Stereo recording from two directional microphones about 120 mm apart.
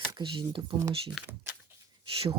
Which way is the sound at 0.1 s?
40° right (ahead or behind).